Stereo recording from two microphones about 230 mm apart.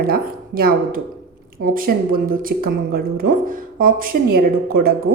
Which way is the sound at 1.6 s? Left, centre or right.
Right.